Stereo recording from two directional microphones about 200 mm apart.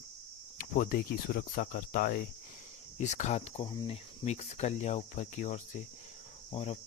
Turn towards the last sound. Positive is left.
turn(degrees=30)  # may be behind; listen again after turning